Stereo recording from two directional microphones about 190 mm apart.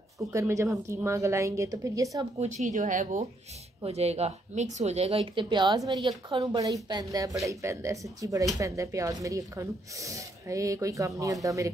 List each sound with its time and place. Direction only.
0.2 s speech: 15° right (ahead or behind)
2.4 s speech: 40° right (ahead or behind); by 11.7 s 15° right (ahead or behind)